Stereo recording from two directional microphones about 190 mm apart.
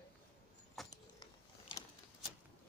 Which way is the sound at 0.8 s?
Centre (ahead or behind).